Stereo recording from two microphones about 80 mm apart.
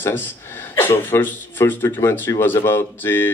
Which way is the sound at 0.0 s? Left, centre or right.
Left.